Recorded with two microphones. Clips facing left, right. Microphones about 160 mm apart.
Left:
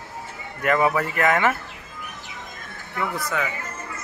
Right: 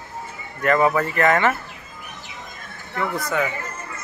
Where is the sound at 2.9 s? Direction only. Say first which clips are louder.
Right 2 dB; 40° right (ahead or behind).